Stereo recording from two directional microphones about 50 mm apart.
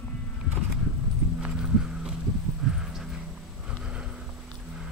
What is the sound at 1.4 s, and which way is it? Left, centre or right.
Clip-clop, centre.